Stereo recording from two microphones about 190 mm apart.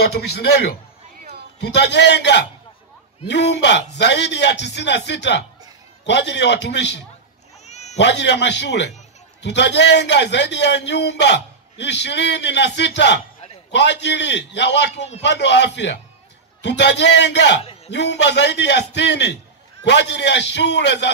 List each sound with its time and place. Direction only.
0.0 s a man's voice: 60° left (ahead or behind)
7.6 s cat: 35° left (ahead or behind)
8.0 s a man's voice: 65° left (ahead or behind)